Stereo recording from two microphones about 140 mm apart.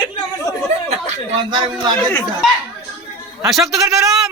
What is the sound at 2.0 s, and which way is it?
Speech, 10° left (ahead or behind).